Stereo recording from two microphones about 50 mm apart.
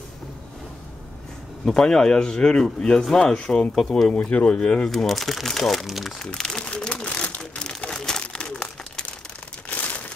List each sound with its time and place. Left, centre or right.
1.7 s speech: centre
4.3 s speech: left
4.6 s speech: centre
4.9 s speech: centre
5.9 s speech: centre
6.1 s speech: centre
6.9 s a sound: left
7.6 s crumpling: centre
9.7 s crumpling: left